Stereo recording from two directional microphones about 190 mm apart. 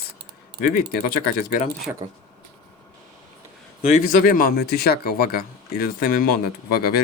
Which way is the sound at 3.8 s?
45° left (ahead or behind).